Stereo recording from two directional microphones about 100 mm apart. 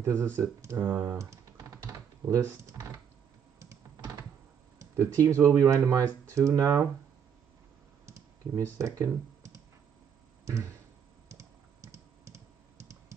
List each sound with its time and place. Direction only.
0.0 s speech: 25° right (ahead or behind)
1.0 s computer keyboard: 30° right (ahead or behind)
3.5 s typing: 30° right (ahead or behind)
4.7 s speech: 35° right (ahead or behind)
8.0 s clicking: 30° right (ahead or behind)
10.4 s a sound: 30° right (ahead or behind)
11.2 s computer keyboard: 30° right (ahead or behind)